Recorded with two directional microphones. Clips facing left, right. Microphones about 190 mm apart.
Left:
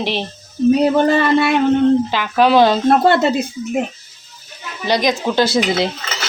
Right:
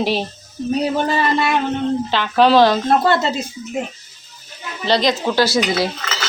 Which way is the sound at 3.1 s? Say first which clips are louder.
Left 3 dB; 60° left (ahead or behind).